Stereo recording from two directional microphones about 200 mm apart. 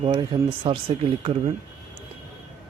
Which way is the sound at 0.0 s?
25° right (ahead or behind).